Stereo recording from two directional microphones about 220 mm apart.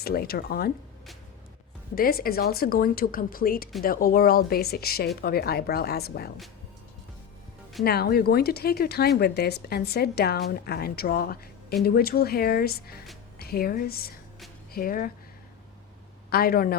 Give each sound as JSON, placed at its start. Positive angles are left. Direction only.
{"t": 0.0, "sound": "speech", "side_deg": 45}
{"t": 2.0, "sound": "speech", "side_deg": 45}
{"t": 7.9, "sound": "speech", "side_deg": 45}
{"t": 16.3, "sound": "speech", "side_deg": 45}